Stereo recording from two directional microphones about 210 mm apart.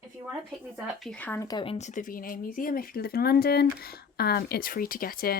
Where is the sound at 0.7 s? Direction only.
Centre (ahead or behind).